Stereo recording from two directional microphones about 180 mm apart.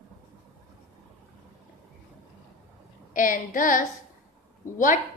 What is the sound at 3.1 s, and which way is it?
A woman's voice, 50° left (ahead or behind).